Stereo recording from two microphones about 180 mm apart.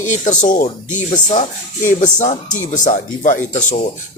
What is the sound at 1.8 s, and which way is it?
Speech, 40° left (ahead or behind).